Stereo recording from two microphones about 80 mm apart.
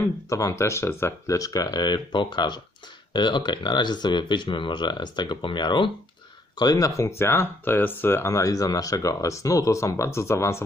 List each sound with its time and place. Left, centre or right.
0.3 s speech: left
6.6 s speech: left
7.0 s speech: left
8.3 s speech: left